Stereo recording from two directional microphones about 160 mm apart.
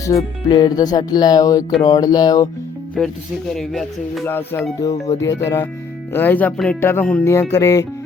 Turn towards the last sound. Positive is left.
turn(degrees=20)  # may be behind; listen again after turning